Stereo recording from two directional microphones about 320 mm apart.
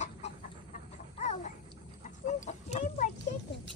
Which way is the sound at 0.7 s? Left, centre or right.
Left.